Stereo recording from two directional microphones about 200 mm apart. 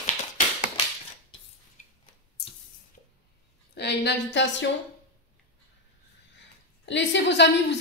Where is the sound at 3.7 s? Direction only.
55° left (ahead or behind).